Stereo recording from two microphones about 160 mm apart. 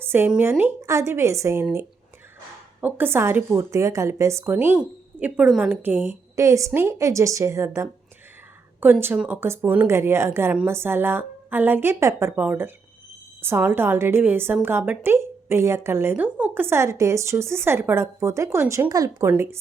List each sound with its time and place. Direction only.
0.0 s a woman's voice: 15° right (ahead or behind)
2.8 s a woman's voice: 15° right (ahead or behind)